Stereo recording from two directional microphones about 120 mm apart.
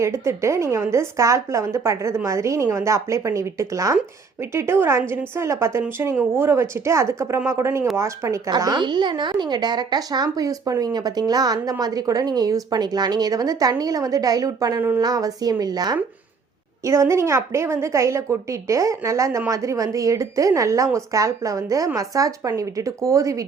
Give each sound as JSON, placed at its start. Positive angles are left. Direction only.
{"t": 0.0, "sound": "a woman's voice", "side_deg": -25}
{"t": 8.4, "sound": "speech", "side_deg": -35}
{"t": 14.8, "sound": "a woman's voice", "side_deg": -20}
{"t": 15.0, "sound": "a woman's voice", "side_deg": -30}